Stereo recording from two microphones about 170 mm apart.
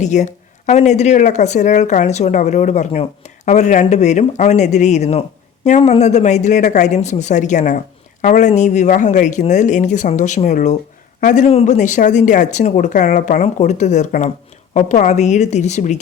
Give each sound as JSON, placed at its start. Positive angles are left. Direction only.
{"t": 0.0, "sound": "speech", "side_deg": 45}